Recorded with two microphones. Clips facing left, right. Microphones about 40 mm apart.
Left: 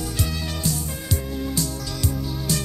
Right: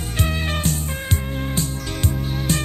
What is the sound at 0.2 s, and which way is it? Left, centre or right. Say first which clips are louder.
Music: right 7 dB; right.